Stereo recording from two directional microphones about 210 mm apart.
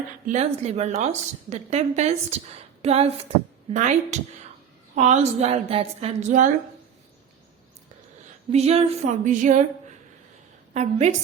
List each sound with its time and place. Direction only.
0.3 s a woman's voice: 30° right (ahead or behind)
8.5 s a woman's voice: 30° right (ahead or behind)
10.8 s a woman's voice: 30° right (ahead or behind)